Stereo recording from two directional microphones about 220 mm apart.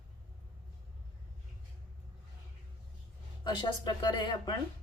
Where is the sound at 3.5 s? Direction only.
20° left (ahead or behind).